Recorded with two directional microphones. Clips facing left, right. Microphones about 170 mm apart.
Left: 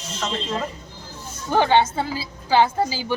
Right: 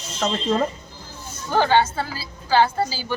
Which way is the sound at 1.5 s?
15° left (ahead or behind).